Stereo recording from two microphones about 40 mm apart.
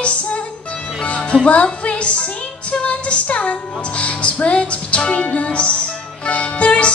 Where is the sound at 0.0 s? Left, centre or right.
Left.